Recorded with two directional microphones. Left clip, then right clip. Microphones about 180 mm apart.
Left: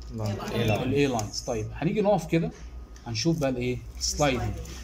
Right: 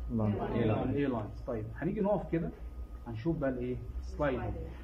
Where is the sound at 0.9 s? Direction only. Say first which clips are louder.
Left 9 dB; 10° left (ahead or behind).